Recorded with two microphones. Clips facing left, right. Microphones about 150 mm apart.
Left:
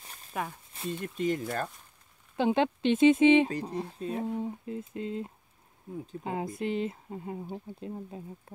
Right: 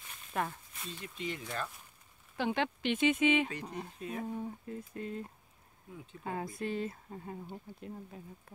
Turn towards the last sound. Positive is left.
turn(degrees=20)  # may be behind; listen again after turning